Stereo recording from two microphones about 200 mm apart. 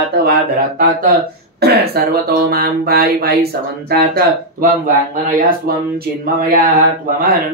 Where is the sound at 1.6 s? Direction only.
55° right (ahead or behind).